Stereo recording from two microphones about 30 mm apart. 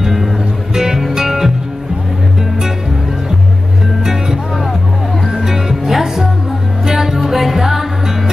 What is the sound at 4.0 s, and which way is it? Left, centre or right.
Music, centre.